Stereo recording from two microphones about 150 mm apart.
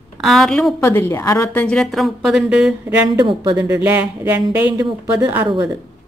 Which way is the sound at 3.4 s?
20° right (ahead or behind).